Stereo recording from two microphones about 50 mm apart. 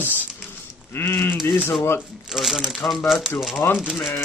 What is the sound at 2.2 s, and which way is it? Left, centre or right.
Speech, centre.